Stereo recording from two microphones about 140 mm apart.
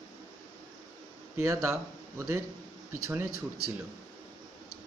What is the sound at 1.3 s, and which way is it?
Speech, 20° right (ahead or behind).